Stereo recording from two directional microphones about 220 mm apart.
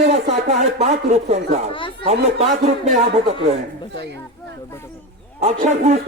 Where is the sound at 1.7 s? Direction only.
25° left (ahead or behind).